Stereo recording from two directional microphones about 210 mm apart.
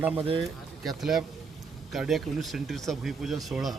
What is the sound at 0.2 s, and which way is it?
Speech, 25° right (ahead or behind).